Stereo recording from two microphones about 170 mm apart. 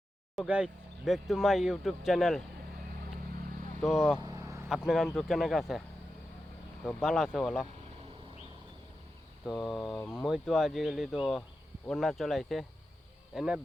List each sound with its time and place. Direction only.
0.3 s speech: 5° right (ahead or behind)
3.8 s speech: centre (ahead or behind)
4.3 s vehicle: 20° right (ahead or behind)
4.7 s speech: centre (ahead or behind)
7.0 s speech: centre (ahead or behind)
9.5 s speech: centre (ahead or behind)